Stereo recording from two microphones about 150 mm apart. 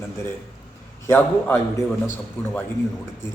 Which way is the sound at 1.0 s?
15° left (ahead or behind).